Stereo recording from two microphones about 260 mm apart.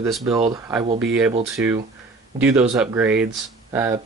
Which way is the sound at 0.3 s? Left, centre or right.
Right.